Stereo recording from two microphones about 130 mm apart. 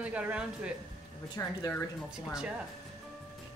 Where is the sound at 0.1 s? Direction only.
10° right (ahead or behind).